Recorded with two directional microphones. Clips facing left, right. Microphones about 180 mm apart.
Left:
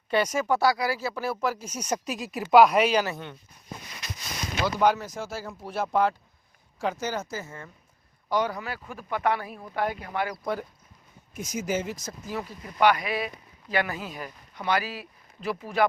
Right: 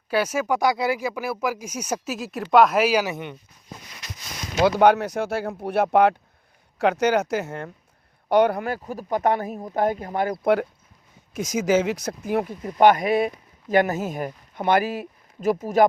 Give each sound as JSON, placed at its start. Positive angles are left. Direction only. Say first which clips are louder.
{"t": 0.1, "sound": "speech", "louder": "right 2 dB", "side_deg": -5}
{"t": 4.6, "sound": "speech", "louder": "right 7 dB", "side_deg": -65}
{"t": 10.4, "sound": "speech", "louder": "right 10 dB", "side_deg": -70}
{"t": 11.3, "sound": "speech", "louder": "right 9 dB", "side_deg": -90}
{"t": 12.6, "sound": "speech", "louder": "right 5 dB", "side_deg": -45}